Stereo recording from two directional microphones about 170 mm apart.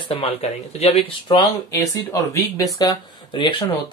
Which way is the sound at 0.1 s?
35° left (ahead or behind).